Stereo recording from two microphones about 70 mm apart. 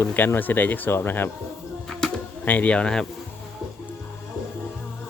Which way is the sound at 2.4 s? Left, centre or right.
Left.